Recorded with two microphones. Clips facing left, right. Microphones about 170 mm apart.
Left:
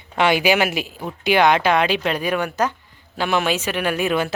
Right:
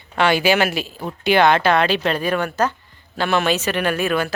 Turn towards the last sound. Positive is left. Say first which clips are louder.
# even
turn(degrees=20)  # may be behind; listen again after turning